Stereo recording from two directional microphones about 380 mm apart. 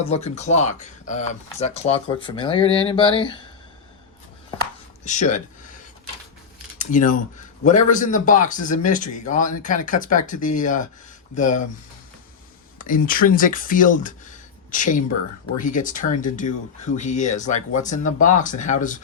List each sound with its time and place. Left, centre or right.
0.0 s speech: centre
5.0 s speech: centre
6.7 s speech: left
12.8 s speech: left